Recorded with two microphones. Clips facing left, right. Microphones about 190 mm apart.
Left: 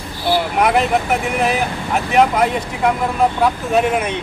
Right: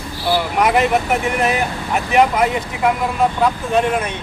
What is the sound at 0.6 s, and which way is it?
Speech, centre (ahead or behind).